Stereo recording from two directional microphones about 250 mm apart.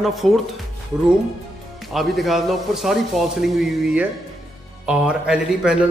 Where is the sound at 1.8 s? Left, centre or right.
Centre.